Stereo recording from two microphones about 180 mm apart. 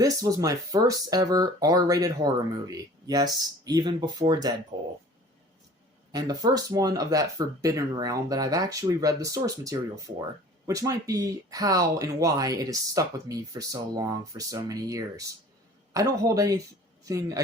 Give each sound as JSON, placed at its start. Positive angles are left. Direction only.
{"t": 0.0, "sound": "speech", "side_deg": -20}
{"t": 4.7, "sound": "a sound", "side_deg": -25}
{"t": 6.1, "sound": "speech", "side_deg": -20}